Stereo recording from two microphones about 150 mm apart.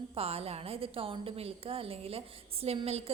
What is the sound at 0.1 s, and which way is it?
A woman's voice, 40° right (ahead or behind).